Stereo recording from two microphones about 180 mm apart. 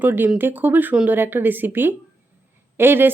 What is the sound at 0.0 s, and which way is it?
Speech, 10° right (ahead or behind).